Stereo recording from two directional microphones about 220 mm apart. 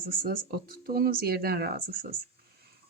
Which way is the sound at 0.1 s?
40° right (ahead or behind).